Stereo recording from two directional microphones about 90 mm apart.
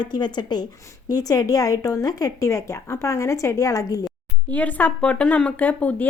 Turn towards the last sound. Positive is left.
turn(degrees=15)  # may be behind; listen again after turning